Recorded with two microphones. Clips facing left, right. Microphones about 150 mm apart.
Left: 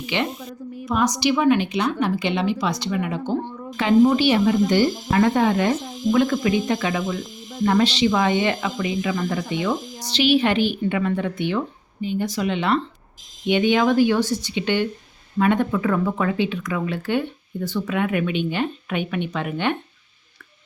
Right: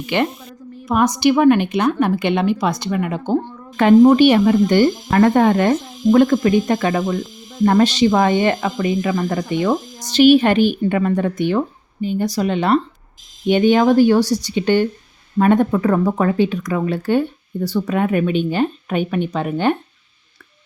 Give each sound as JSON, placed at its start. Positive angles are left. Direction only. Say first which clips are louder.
{"t": 0.0, "sound": "speech", "louder": "right 5 dB", "side_deg": -50}